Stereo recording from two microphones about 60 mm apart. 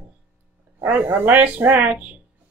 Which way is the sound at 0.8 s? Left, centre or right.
Right.